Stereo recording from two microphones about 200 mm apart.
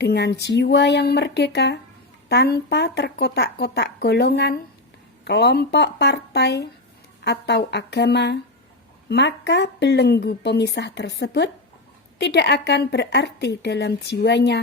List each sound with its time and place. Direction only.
0.0 s a woman's voice: 55° left (ahead or behind)